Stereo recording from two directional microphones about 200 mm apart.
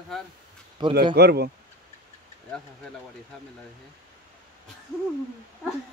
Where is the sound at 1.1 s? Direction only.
55° right (ahead or behind).